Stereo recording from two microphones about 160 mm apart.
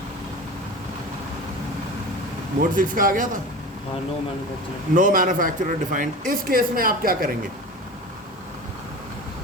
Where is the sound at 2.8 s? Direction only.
60° right (ahead or behind).